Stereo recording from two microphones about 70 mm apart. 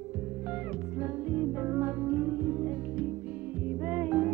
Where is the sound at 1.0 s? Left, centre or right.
Centre.